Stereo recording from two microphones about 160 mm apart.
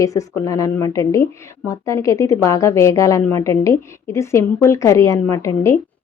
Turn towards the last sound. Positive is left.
turn(degrees=20)  # may be behind; listen again after turning